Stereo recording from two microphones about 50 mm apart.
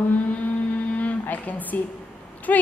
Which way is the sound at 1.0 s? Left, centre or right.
Left.